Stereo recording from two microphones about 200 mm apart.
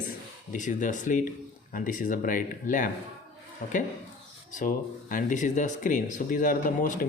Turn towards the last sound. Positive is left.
turn(degrees=40)  # may be behind; listen again after turning